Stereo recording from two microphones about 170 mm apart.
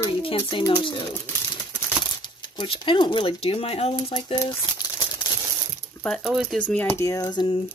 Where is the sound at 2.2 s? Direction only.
25° left (ahead or behind).